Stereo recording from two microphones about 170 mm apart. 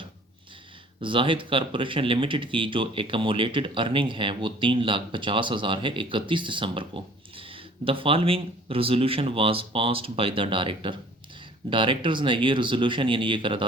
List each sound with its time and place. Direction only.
1.0 s speech: 30° right (ahead or behind)